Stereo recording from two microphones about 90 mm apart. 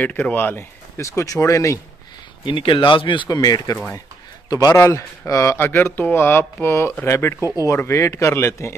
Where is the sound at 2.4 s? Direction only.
65° left (ahead or behind).